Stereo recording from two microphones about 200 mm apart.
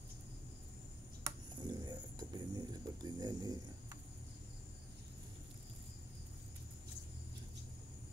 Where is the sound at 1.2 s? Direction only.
20° right (ahead or behind).